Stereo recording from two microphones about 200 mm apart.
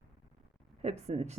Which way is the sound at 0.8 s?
30° right (ahead or behind).